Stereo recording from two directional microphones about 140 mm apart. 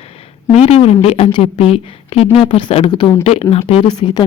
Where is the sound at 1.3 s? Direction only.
35° left (ahead or behind).